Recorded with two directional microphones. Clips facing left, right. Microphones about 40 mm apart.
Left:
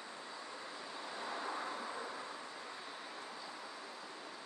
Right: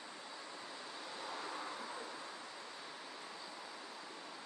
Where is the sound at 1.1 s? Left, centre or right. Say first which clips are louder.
Left 3 dB; left.